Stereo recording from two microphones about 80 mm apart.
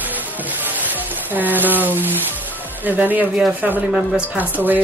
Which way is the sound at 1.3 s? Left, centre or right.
Right.